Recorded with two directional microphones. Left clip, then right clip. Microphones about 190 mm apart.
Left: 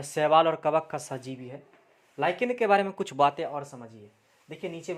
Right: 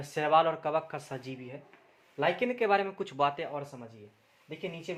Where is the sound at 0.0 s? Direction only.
40° left (ahead or behind).